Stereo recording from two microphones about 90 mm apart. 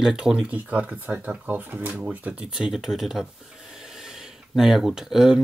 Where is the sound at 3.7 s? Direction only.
5° right (ahead or behind).